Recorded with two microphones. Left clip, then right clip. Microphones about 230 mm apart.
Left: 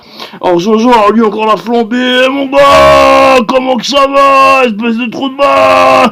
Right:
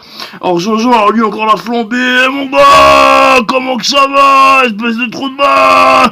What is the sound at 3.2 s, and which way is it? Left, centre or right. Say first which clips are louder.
Speech: left 1 dB; centre.